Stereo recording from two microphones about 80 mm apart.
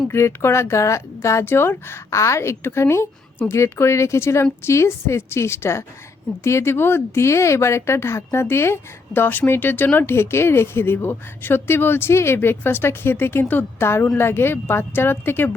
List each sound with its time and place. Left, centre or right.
0.1 s speech: left